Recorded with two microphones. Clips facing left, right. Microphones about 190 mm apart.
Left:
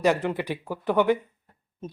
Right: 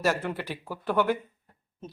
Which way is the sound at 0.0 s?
15° left (ahead or behind).